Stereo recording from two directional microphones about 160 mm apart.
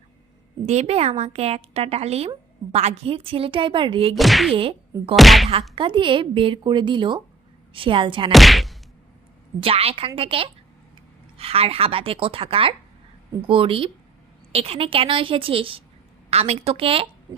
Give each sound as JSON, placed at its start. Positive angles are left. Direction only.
{"t": 0.6, "sound": "a woman's voice", "side_deg": -45}
{"t": 4.1, "sound": "whack", "side_deg": 0}
{"t": 4.5, "sound": "whack", "side_deg": -35}
{"t": 5.1, "sound": "whack", "side_deg": 0}
{"t": 5.7, "sound": "a woman's voice", "side_deg": -30}
{"t": 8.3, "sound": "whack", "side_deg": 0}
{"t": 9.6, "sound": "a woman's voice", "side_deg": -35}